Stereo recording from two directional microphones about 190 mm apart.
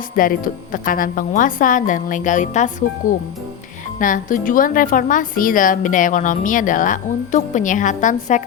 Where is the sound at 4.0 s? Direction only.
45° left (ahead or behind).